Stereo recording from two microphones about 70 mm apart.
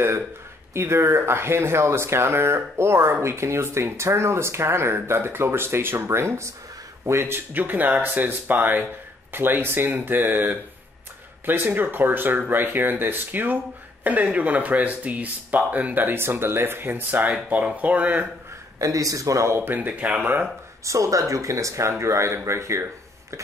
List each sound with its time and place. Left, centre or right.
0.7 s speech: right
17.5 s speech: right
18.8 s speech: right
20.8 s speech: right